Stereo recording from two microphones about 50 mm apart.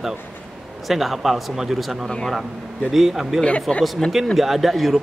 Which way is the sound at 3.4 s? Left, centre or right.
Centre.